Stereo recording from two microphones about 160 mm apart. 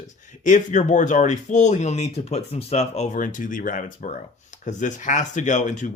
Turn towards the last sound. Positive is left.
turn(degrees=50)  # may be behind; listen again after turning